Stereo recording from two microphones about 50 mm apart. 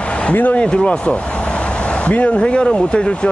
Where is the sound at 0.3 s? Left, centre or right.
Left.